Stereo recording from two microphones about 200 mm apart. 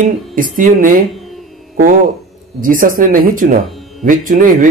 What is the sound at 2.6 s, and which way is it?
Speech, 45° right (ahead or behind).